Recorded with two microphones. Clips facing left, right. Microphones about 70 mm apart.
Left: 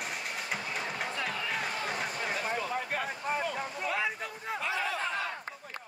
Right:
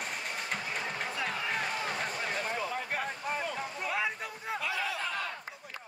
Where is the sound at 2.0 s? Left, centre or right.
Centre.